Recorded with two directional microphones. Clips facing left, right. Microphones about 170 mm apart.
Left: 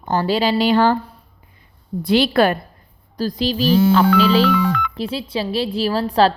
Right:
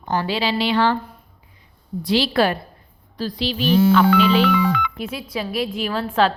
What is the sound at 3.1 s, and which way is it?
Speech, 40° left (ahead or behind).